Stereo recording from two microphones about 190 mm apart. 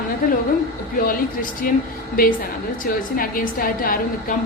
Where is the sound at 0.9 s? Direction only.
50° left (ahead or behind).